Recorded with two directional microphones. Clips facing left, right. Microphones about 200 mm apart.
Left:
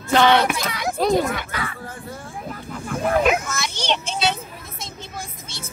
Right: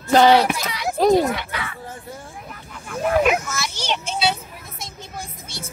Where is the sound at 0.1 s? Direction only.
35° right (ahead or behind).